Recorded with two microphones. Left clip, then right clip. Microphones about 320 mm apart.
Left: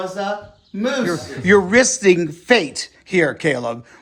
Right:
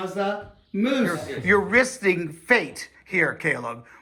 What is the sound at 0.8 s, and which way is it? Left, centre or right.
A man's voice, centre.